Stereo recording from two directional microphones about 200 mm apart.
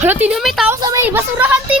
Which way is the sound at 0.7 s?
15° right (ahead or behind).